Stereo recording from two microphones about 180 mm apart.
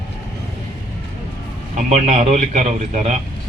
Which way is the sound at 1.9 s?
35° right (ahead or behind).